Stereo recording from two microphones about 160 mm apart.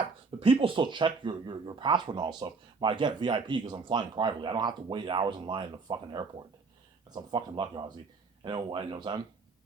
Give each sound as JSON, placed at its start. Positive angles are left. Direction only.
{"t": 0.3, "sound": "speech", "side_deg": -35}